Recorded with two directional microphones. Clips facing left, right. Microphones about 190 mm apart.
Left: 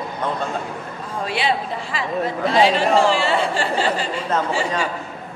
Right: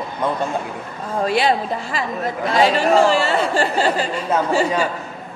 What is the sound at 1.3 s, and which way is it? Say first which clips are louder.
Speech: right 4 dB; 45° right (ahead or behind).